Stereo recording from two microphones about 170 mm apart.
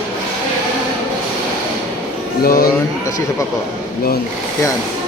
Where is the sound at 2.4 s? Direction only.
60° left (ahead or behind).